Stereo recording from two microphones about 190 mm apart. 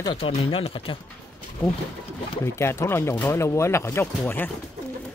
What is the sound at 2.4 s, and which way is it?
Speech, 15° left (ahead or behind).